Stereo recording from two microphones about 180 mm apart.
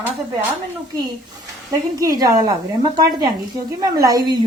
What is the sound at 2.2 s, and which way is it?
Speech, 20° right (ahead or behind).